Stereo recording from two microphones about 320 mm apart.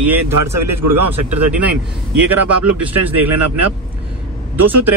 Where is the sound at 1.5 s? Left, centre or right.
Centre.